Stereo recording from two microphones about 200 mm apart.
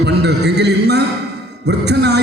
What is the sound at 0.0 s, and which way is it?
A man's voice, 55° right (ahead or behind).